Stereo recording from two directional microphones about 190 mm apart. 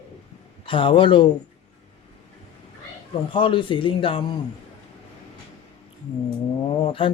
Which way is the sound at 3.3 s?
25° left (ahead or behind).